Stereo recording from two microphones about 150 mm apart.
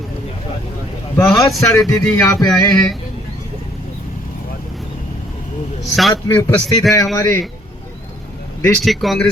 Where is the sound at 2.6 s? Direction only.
5° left (ahead or behind).